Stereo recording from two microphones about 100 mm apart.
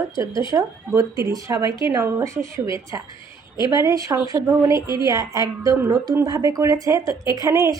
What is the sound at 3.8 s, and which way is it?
Speech, 35° right (ahead or behind).